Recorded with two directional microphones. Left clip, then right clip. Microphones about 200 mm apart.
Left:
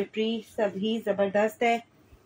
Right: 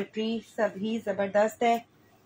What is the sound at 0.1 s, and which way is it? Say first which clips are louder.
A woman's voice: left 3 dB; 15° left (ahead or behind).